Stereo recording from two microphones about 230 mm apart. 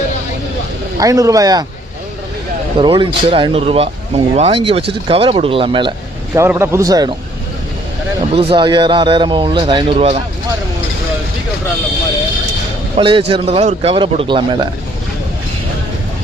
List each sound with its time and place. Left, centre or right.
0.9 s a man's voice: centre
2.7 s speech: right
6.3 s a man's voice: centre
8.3 s speech: right
13.0 s speech: right